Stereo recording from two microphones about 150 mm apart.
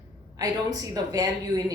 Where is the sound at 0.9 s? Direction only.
25° right (ahead or behind).